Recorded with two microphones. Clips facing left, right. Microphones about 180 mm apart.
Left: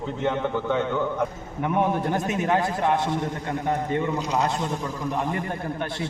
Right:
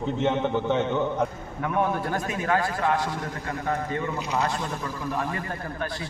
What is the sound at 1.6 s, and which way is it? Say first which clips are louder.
A man's voice: left 2 dB; 20° left (ahead or behind).